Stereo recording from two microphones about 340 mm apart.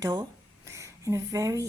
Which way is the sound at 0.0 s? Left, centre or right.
Centre.